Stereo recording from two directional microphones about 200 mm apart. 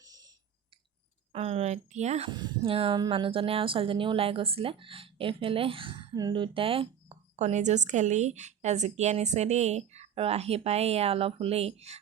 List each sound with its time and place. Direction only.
0.0 s a sound: 20° right (ahead or behind)
1.3 s a woman's voice: 30° right (ahead or behind)
2.3 s a woman's voice: 20° right (ahead or behind)